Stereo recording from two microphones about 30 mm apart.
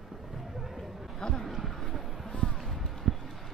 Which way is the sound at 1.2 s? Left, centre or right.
Left.